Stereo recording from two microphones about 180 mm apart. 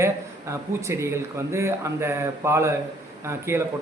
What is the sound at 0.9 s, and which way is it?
A man's voice, 15° right (ahead or behind).